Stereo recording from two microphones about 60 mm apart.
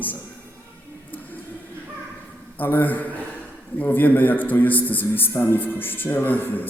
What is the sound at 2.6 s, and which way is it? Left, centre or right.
A man's voice, left.